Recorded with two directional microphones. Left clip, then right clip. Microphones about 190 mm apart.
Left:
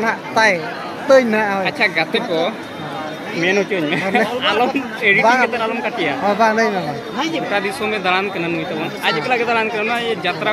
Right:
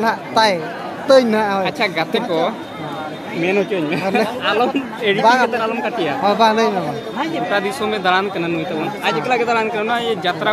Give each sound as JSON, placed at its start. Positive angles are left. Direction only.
{"t": 0.0, "sound": "speech", "side_deg": -10}
{"t": 1.6, "sound": "speech", "side_deg": -25}
{"t": 3.4, "sound": "speech", "side_deg": -15}
{"t": 5.2, "sound": "speech", "side_deg": 0}
{"t": 5.5, "sound": "speech", "side_deg": -20}
{"t": 6.2, "sound": "speech", "side_deg": 0}
{"t": 7.5, "sound": "speech", "side_deg": -25}